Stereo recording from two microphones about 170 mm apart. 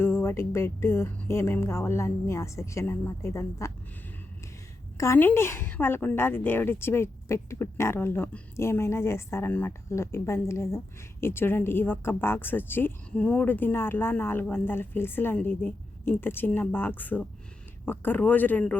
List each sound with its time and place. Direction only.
0.0 s speech: 15° left (ahead or behind)
4.9 s speech: 15° left (ahead or behind)